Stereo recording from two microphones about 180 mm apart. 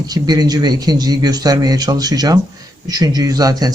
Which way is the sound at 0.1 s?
20° right (ahead or behind).